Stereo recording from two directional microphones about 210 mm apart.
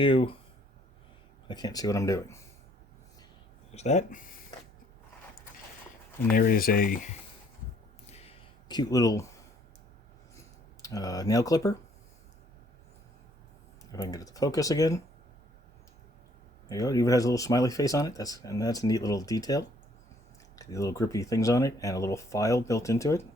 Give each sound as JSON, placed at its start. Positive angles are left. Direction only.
{"t": 0.0, "sound": "speech", "side_deg": 25}
{"t": 1.5, "sound": "speech", "side_deg": 20}
{"t": 3.8, "sound": "speech", "side_deg": 35}
{"t": 6.3, "sound": "speech", "side_deg": 45}
{"t": 8.6, "sound": "speech", "side_deg": 20}
{"t": 10.8, "sound": "speech", "side_deg": 15}
{"t": 13.9, "sound": "speech", "side_deg": 15}
{"t": 16.6, "sound": "speech", "side_deg": 15}